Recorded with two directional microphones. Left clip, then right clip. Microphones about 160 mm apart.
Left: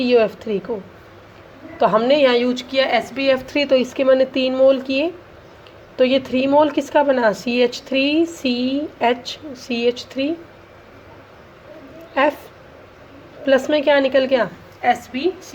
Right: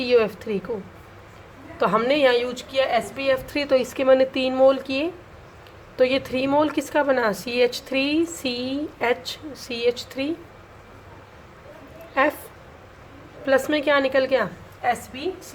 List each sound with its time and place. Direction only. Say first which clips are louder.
0.0 s a woman's voice: left 4 dB; 5° left (ahead or behind)
1.8 s a woman's voice: left 5 dB; 5° left (ahead or behind)
2.7 s a woman's voice: left 3 dB; 30° left (ahead or behind)
3.4 s a woman's voice: left 4 dB; 15° left (ahead or behind)
13.4 s a woman's voice: left 5 dB; 10° left (ahead or behind)
14.8 s a woman's voice: left 6 dB; 35° left (ahead or behind)